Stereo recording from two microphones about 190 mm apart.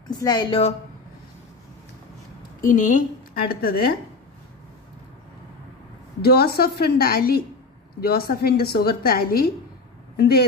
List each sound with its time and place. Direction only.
0.1 s a woman's voice: 20° left (ahead or behind)
2.6 s a woman's voice: 40° left (ahead or behind)
6.2 s a woman's voice: 55° left (ahead or behind)